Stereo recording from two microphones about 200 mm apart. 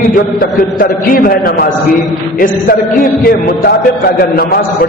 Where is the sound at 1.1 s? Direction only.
45° left (ahead or behind).